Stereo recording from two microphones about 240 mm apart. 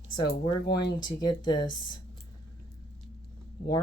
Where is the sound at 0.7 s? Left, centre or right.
Centre.